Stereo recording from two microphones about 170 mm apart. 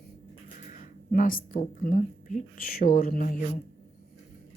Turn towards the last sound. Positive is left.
turn(degrees=50)  # may be behind; listen again after turning